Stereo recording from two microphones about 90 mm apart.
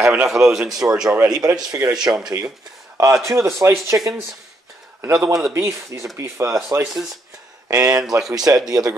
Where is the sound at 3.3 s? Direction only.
35° right (ahead or behind).